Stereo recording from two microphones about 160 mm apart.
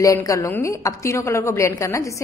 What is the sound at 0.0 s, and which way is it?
A woman's voice, 20° left (ahead or behind).